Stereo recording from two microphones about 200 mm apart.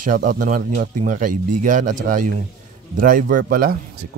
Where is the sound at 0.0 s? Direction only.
40° right (ahead or behind).